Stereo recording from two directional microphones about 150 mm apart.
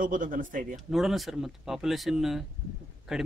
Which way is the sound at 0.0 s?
65° right (ahead or behind).